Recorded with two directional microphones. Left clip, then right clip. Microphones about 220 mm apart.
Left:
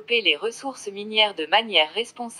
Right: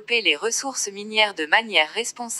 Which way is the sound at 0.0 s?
15° right (ahead or behind).